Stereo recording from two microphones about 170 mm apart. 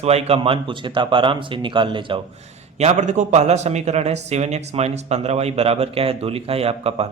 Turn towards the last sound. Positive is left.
turn(degrees=-35)  # may be behind; listen again after turning